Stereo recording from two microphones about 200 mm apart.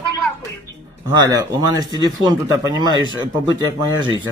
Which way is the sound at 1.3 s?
20° right (ahead or behind).